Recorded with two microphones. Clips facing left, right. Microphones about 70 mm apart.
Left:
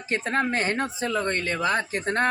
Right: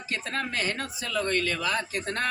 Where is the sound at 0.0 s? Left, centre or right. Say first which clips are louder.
Left 6 dB; left.